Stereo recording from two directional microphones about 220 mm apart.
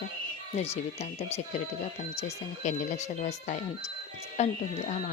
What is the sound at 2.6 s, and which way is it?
A woman's voice, 35° left (ahead or behind).